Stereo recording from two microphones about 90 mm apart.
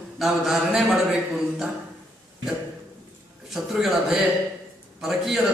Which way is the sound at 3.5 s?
5° right (ahead or behind).